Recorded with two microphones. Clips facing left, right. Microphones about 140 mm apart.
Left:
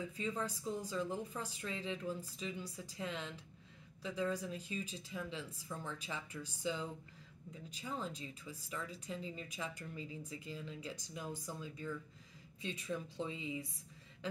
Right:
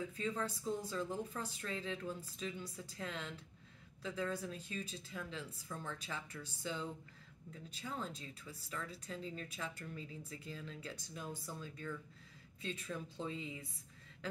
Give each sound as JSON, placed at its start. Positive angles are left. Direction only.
{"t": 0.2, "sound": "speech", "side_deg": 10}